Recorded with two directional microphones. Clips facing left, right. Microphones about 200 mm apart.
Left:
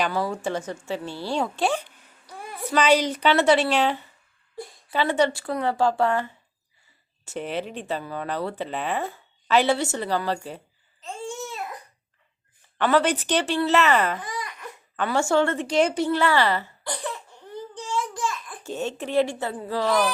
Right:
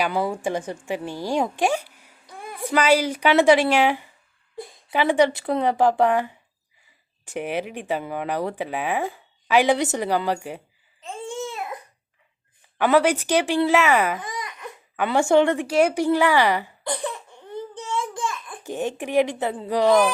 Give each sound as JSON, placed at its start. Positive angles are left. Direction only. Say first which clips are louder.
{"t": 0.0, "sound": "speech", "louder": "right 2 dB", "side_deg": -15}
{"t": 12.8, "sound": "speech", "louder": "right 3 dB", "side_deg": -10}
{"t": 14.2, "sound": "babbling", "louder": "right 1 dB", "side_deg": -20}
{"t": 14.9, "sound": "speech", "louder": "right 4 dB", "side_deg": -15}
{"t": 18.6, "sound": "speech", "louder": "right 2 dB", "side_deg": -15}